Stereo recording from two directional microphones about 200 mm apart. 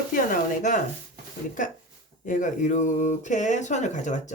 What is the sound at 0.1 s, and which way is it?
Speech, 40° left (ahead or behind).